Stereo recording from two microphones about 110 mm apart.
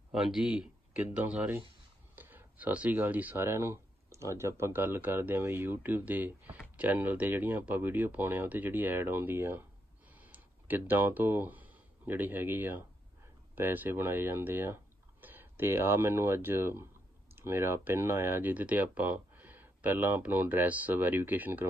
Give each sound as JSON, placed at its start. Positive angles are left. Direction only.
{"t": 0.1, "sound": "speech", "side_deg": -5}